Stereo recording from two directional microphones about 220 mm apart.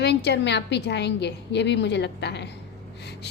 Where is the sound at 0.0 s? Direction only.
50° left (ahead or behind).